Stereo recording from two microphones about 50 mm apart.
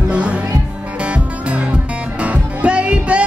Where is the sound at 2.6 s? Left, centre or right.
Right.